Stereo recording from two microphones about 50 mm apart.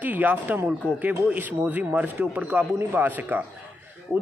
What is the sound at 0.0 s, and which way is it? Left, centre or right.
Speech, right.